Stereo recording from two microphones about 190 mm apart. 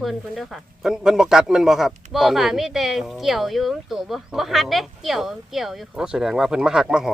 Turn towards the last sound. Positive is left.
turn(degrees=-5)  # may be behind; listen again after turning